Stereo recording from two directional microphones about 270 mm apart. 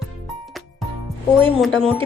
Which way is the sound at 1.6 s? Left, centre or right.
Centre.